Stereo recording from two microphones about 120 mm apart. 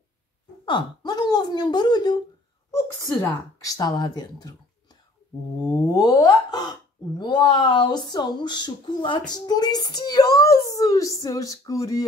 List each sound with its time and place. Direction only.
0.7 s speech: 35° left (ahead or behind)
5.9 s speech: 30° left (ahead or behind)